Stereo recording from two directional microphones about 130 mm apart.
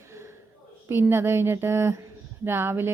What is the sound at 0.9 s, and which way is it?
Speech, 20° right (ahead or behind).